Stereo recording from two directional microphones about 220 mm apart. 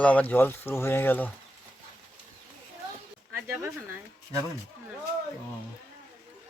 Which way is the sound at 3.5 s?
10° right (ahead or behind).